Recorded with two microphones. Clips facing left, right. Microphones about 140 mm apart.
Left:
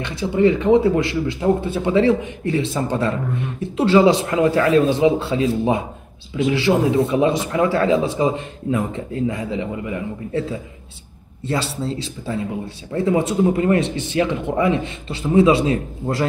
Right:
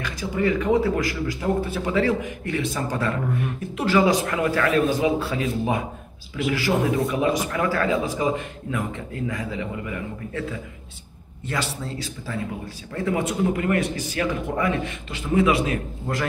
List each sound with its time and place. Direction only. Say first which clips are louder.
0.0 s a man's voice: left 7 dB; 25° left (ahead or behind)